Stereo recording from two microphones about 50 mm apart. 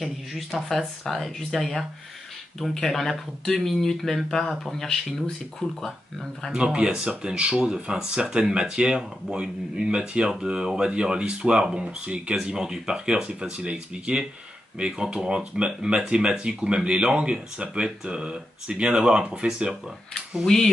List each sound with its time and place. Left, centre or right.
0.0 s speech: centre
5.6 s speech: centre
6.5 s speech: centre
20.4 s speech: centre